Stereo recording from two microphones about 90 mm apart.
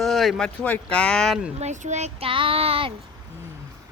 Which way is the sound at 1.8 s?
90° right.